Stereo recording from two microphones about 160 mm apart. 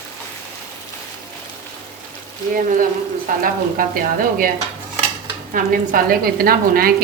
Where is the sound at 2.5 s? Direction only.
60° right (ahead or behind).